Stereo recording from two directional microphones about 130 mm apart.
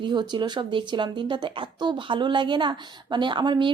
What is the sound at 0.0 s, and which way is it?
Speech, 35° right (ahead or behind).